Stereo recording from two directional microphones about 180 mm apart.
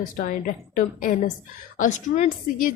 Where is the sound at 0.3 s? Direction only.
45° left (ahead or behind).